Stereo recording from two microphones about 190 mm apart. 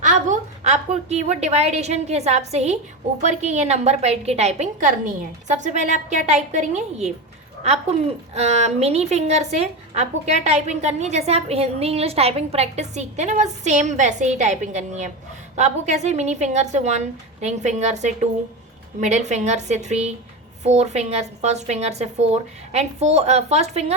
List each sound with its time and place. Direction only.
0.0 s a woman's voice: 40° right (ahead or behind)
8.4 s a woman's voice: 35° right (ahead or behind)